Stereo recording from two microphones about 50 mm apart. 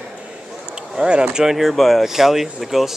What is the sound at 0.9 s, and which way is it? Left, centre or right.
Speech, centre.